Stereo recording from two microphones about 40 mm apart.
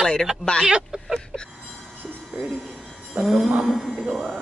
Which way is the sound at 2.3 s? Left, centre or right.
Right.